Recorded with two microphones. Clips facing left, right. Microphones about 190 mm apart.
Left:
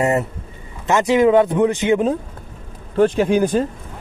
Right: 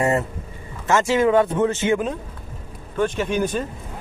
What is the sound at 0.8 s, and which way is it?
Speech, 15° left (ahead or behind).